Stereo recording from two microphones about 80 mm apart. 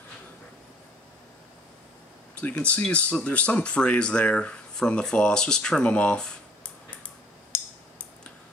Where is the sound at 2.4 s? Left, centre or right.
Centre.